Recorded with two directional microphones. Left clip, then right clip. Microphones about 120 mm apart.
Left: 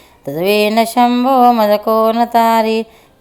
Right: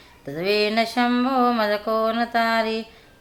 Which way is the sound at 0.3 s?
55° left (ahead or behind).